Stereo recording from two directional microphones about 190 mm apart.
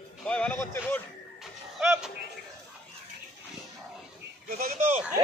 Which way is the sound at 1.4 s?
5° right (ahead or behind).